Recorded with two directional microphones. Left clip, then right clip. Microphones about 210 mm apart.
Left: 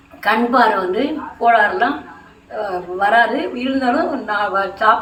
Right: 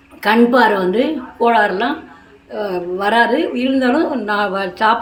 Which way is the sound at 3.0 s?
50° right (ahead or behind).